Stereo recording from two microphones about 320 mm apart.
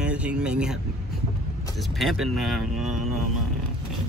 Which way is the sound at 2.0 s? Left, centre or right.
Centre.